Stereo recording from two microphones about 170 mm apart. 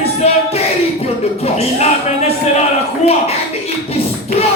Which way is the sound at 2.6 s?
40° left (ahead or behind).